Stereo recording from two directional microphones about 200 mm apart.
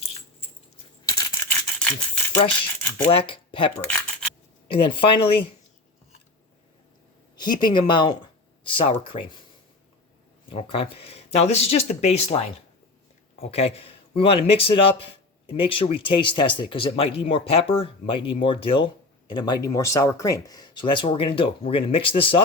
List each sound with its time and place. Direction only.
1.0 s a sound: 20° left (ahead or behind)
1.5 s toothbrush: 5° left (ahead or behind)
2.5 s speech: 10° left (ahead or behind)
3.1 s speech: 25° left (ahead or behind)
3.8 s a sound: 10° left (ahead or behind)
4.7 s speech: 25° left (ahead or behind)
7.3 s speech: 20° left (ahead or behind)
10.5 s speech: 30° left (ahead or behind)
13.5 s speech: 30° left (ahead or behind)